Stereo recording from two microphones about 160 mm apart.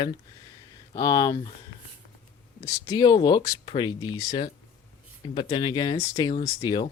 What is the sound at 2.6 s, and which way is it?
Speech, 25° left (ahead or behind).